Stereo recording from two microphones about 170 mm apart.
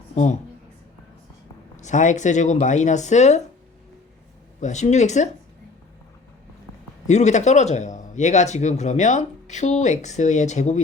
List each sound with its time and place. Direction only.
0.1 s speech: 45° left (ahead or behind)
1.8 s speech: 45° left (ahead or behind)
4.6 s speech: 45° left (ahead or behind)
7.1 s speech: 45° left (ahead or behind)